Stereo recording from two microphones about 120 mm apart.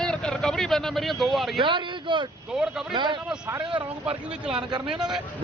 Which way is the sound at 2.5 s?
5° right (ahead or behind).